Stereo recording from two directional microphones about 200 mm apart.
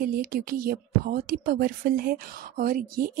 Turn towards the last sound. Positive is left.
turn(degrees=-45)  # may be behind; listen again after turning